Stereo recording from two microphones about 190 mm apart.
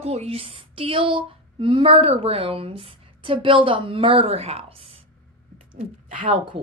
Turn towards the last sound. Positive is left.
turn(degrees=-40)  # may be behind; listen again after turning